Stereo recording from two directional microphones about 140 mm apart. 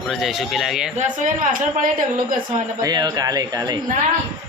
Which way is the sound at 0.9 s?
65° right (ahead or behind).